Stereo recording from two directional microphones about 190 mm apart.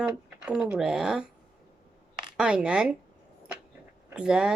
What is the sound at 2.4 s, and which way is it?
Speech, 5° right (ahead or behind).